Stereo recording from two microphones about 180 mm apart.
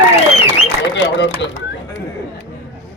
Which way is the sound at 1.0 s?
85° left.